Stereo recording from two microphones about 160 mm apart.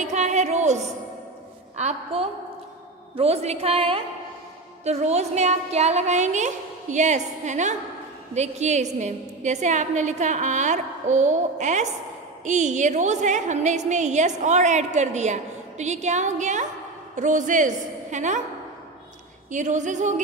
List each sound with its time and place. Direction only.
0.0 s a sound: 45° right (ahead or behind)
1.8 s a woman's voice: 45° right (ahead or behind)
19.5 s a woman's voice: 50° right (ahead or behind)